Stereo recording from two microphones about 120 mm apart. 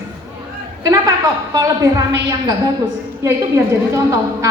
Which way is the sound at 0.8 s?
30° right (ahead or behind).